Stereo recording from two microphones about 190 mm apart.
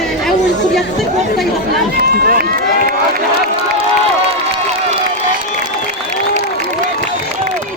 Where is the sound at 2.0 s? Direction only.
50° right (ahead or behind).